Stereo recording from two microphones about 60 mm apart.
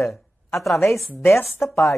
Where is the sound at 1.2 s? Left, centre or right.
Left.